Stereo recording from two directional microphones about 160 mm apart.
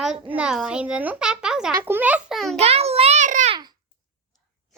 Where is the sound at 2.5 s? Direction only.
40° right (ahead or behind).